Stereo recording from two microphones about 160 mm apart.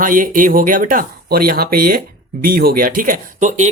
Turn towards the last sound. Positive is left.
turn(degrees=-50)  # may be behind; listen again after turning